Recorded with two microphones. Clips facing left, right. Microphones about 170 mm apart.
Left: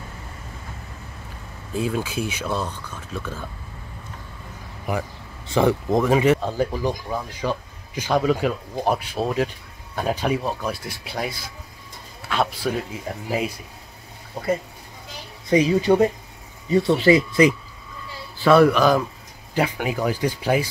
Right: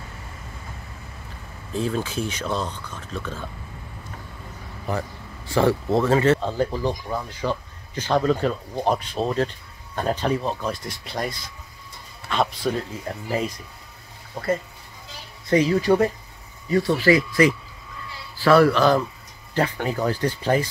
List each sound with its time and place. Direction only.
1.7 s speech: 10° left (ahead or behind)
4.9 s speech: 10° left (ahead or behind)
15.5 s speech: 15° left (ahead or behind)